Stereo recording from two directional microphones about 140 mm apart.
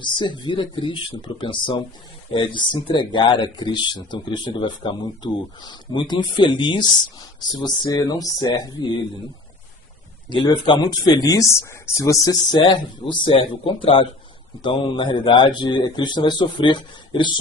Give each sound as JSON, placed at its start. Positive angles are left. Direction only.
{"t": 0.0, "sound": "speech", "side_deg": 35}
{"t": 10.2, "sound": "speech", "side_deg": 35}